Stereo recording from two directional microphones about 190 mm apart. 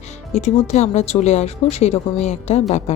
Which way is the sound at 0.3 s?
35° left (ahead or behind).